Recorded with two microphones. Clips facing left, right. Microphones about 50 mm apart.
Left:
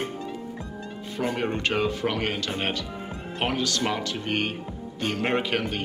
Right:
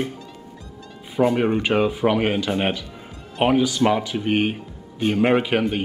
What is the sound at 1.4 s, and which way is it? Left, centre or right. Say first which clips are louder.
A man's voice: right 6 dB; centre.